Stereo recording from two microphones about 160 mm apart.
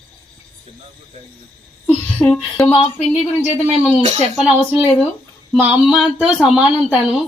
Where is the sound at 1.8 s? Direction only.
5° left (ahead or behind).